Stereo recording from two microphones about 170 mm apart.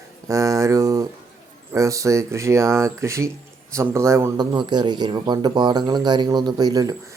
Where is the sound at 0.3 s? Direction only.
20° right (ahead or behind).